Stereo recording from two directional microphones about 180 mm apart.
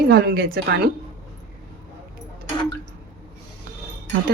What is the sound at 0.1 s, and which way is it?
Speech, 55° right (ahead or behind).